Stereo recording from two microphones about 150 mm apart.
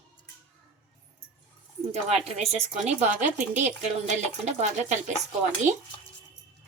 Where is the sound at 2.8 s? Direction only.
55° right (ahead or behind).